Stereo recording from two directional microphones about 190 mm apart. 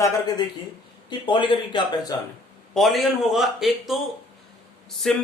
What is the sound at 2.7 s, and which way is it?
Speech, centre (ahead or behind).